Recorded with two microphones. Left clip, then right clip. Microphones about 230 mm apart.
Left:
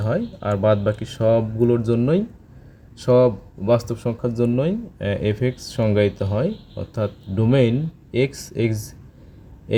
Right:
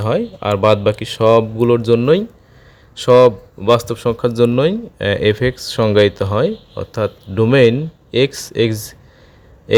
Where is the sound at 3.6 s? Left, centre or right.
Centre.